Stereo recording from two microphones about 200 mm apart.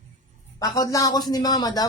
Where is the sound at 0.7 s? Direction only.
15° left (ahead or behind).